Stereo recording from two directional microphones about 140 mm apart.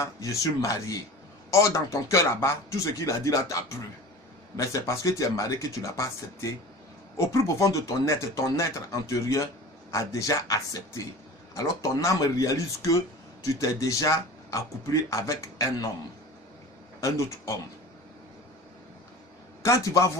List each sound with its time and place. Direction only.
0.0 s speech: 20° left (ahead or behind)
17.0 s speech: 20° left (ahead or behind)
19.6 s speech: 20° left (ahead or behind)